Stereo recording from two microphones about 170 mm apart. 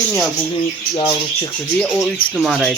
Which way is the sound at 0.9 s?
30° left (ahead or behind).